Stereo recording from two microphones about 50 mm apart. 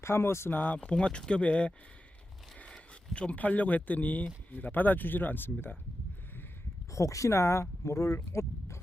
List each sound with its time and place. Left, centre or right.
0.0 s speech: left
0.5 s speech: left
0.9 s speech: left
6.9 s speech: left